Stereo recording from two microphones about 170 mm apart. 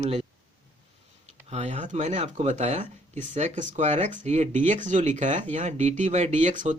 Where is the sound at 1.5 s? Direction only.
40° right (ahead or behind).